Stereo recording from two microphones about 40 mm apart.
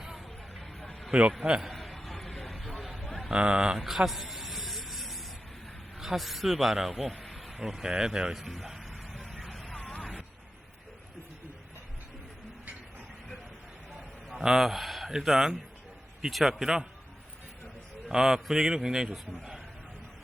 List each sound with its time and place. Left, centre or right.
0.6 s a sound: centre
1.6 s vehicle: centre
3.2 s speech: right
3.8 s a sound: centre
6.0 s a man's voice: centre
7.6 s speech: centre
8.4 s a sound: centre
9.6 s vehicle: centre
14.3 s a man's voice: centre
14.7 s a sound: centre
15.1 s a man's voice: centre
18.1 s speech: centre